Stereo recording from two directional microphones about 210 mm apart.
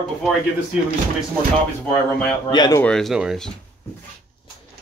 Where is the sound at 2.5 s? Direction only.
20° left (ahead or behind).